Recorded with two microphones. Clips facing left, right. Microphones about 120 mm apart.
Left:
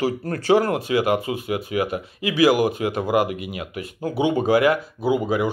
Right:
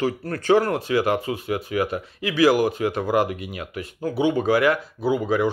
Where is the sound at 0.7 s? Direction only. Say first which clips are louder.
Left 1 dB; 15° left (ahead or behind).